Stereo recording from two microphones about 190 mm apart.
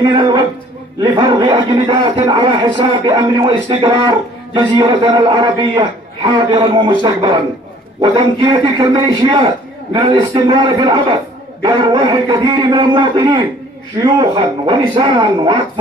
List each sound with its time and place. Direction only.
0.0 s a man's voice: 25° right (ahead or behind)